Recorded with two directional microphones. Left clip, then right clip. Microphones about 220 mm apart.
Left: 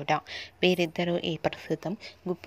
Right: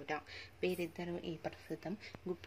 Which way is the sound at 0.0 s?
30° left (ahead or behind).